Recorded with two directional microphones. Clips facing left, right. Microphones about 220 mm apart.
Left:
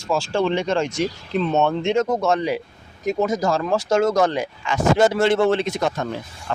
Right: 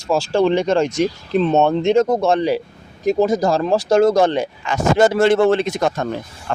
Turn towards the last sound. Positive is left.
turn(degrees=-50)  # may be behind; listen again after turning